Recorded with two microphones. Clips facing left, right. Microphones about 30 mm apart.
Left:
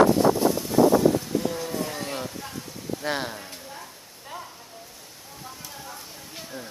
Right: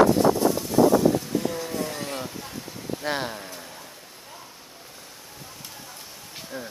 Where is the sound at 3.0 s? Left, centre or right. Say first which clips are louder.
Right 1 dB; centre.